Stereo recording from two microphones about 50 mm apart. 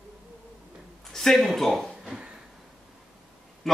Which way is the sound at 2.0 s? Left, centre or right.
Centre.